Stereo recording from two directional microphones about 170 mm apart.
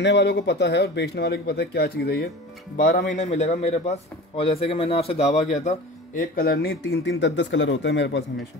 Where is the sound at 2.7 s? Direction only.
55° left (ahead or behind); by 8.5 s 90° left.